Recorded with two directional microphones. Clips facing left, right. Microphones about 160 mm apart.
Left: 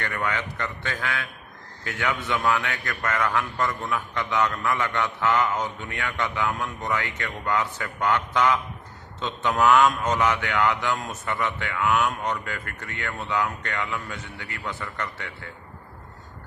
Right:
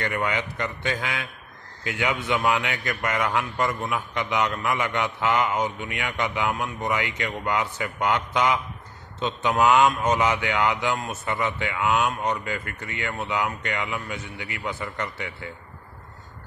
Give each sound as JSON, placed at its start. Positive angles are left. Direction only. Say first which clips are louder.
{"t": 0.0, "sound": "a man's voice", "louder": "right 2 dB", "side_deg": -20}